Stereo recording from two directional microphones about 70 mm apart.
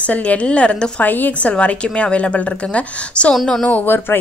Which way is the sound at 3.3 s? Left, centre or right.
Centre.